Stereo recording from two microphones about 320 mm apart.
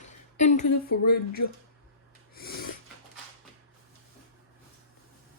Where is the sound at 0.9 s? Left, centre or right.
Left.